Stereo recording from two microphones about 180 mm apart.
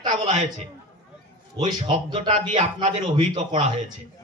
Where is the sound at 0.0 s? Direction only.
40° right (ahead or behind).